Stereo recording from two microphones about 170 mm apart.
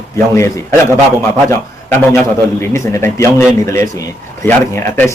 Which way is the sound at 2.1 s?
15° left (ahead or behind).